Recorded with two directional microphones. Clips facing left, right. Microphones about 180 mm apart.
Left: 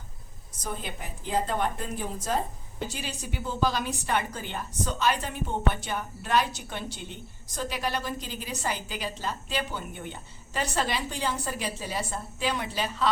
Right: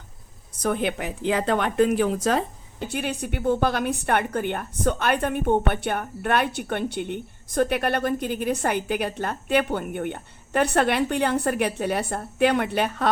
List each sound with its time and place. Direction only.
0.6 s speech: 70° right (ahead or behind)
2.8 s a woman's voice: 60° right (ahead or behind)